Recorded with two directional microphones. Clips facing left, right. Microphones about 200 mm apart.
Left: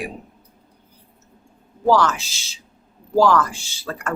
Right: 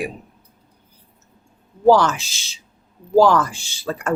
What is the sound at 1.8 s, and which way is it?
Speech, 20° right (ahead or behind).